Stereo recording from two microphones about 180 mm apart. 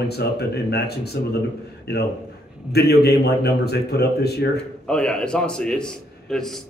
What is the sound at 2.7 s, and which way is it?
A man's voice, 60° left (ahead or behind).